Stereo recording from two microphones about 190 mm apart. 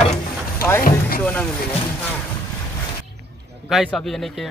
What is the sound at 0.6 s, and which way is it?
Speech, 10° left (ahead or behind).